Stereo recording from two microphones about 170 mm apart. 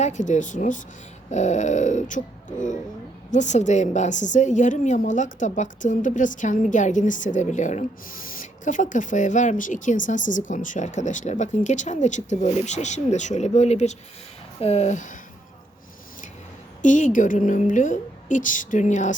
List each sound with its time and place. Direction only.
0.0 s a woman's voice: 45° left (ahead or behind)
3.3 s a woman's voice: 45° left (ahead or behind)
16.8 s a woman's voice: 50° left (ahead or behind)